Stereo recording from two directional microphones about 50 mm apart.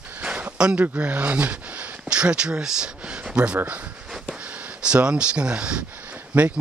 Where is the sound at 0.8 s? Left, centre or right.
Right.